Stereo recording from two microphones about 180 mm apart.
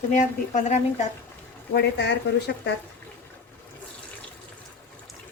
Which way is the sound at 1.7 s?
70° left (ahead or behind).